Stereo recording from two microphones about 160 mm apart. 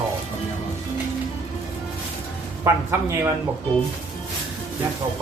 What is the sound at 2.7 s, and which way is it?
Speech, 15° right (ahead or behind).